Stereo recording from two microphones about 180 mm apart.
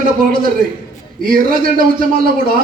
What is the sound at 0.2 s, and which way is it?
A man's voice, 50° right (ahead or behind).